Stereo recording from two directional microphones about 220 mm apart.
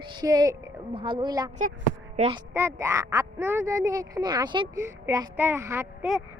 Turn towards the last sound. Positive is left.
turn(degrees=-10)  # may be behind; listen again after turning